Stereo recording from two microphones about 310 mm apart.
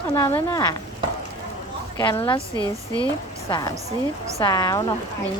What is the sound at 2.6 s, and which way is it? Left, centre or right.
Speech, centre.